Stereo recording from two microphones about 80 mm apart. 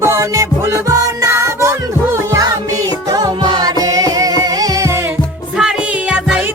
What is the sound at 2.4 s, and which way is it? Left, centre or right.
Music, right.